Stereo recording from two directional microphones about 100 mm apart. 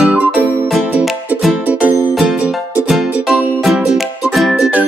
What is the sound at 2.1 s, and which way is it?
Music, centre (ahead or behind).